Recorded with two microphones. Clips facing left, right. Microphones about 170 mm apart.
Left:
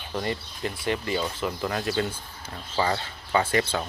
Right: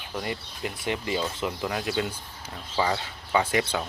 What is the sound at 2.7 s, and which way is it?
Speech, 5° right (ahead or behind).